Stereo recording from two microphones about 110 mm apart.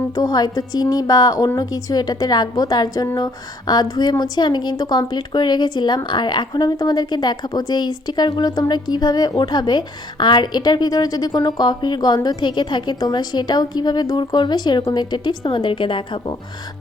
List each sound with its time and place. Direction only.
0.1 s a woman's voice: 40° left (ahead or behind)